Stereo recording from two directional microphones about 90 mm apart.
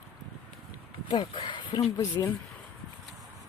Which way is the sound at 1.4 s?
45° left (ahead or behind).